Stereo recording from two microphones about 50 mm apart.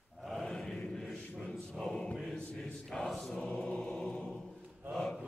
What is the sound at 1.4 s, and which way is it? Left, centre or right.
Choir, centre.